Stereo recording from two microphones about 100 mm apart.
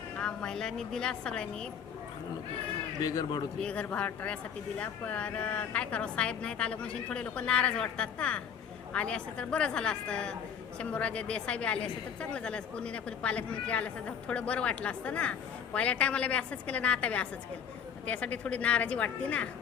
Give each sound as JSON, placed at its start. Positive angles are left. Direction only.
{"t": 0.2, "sound": "a woman's voice", "side_deg": 5}
{"t": 3.0, "sound": "a man's voice", "side_deg": 40}
{"t": 3.6, "sound": "a woman's voice", "side_deg": 10}